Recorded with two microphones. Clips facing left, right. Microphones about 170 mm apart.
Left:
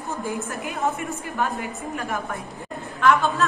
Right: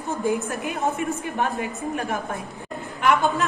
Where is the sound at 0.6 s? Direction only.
20° right (ahead or behind).